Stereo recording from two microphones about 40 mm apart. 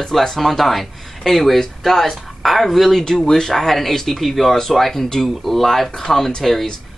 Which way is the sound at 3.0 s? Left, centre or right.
Centre.